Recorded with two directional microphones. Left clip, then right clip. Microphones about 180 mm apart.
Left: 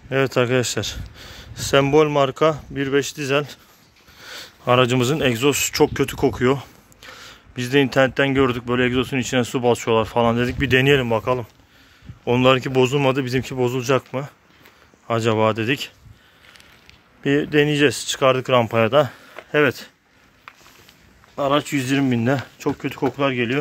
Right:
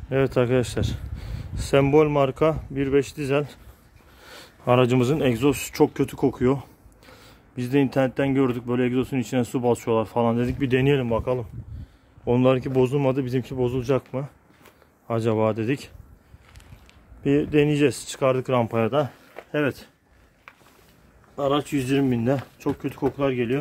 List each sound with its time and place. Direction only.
0.1 s speech: centre (ahead or behind)
17.2 s speech: 5° left (ahead or behind)
21.4 s speech: 15° left (ahead or behind)